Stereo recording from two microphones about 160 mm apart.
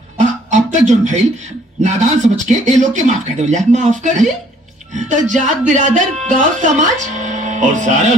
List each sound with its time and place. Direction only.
0.2 s music: 50° right (ahead or behind)
1.8 s speech: 50° right (ahead or behind)